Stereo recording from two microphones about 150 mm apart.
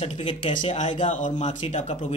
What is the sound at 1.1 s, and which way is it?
Speech, 50° left (ahead or behind).